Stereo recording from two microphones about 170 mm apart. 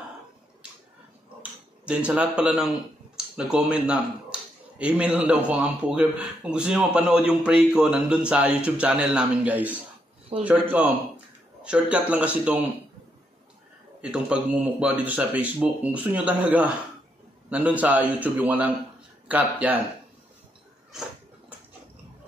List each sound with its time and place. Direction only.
1.4 s speech: 5° right (ahead or behind)
14.0 s speech: 5° right (ahead or behind)